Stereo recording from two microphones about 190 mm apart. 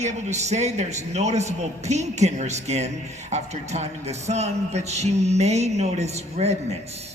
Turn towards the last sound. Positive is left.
turn(degrees=-35)  # may be behind; listen again after turning